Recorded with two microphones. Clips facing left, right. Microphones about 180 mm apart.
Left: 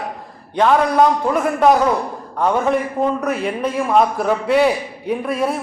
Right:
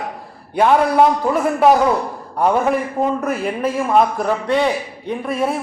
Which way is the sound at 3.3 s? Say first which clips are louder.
Even; centre (ahead or behind).